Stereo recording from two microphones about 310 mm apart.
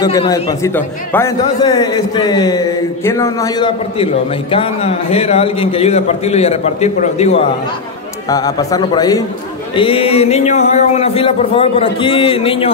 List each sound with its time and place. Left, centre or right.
0.0 s a man's voice: centre